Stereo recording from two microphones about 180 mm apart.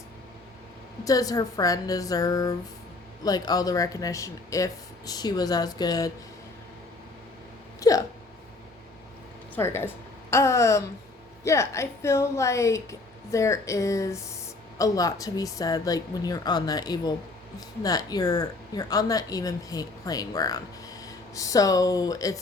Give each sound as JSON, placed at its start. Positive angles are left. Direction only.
{"t": 1.0, "sound": "speech", "side_deg": 20}
{"t": 7.8, "sound": "hiccup", "side_deg": 20}
{"t": 9.6, "sound": "a woman's voice", "side_deg": 15}